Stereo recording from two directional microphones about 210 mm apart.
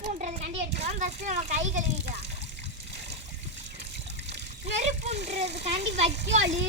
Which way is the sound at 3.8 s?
55° right (ahead or behind).